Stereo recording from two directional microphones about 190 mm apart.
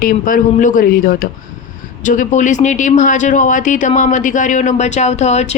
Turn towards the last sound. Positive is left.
turn(degrees=35)  # may be behind; listen again after turning